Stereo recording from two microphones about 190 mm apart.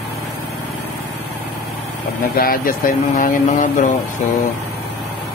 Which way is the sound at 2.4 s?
50° left (ahead or behind).